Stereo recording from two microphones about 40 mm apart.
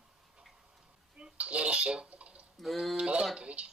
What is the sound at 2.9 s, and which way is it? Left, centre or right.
Speech, right.